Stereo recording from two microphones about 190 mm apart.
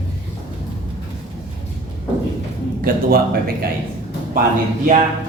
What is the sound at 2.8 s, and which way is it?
Speech, 50° right (ahead or behind).